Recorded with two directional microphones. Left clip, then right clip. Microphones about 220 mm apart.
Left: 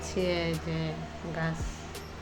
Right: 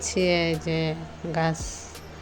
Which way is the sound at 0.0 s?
30° right (ahead or behind).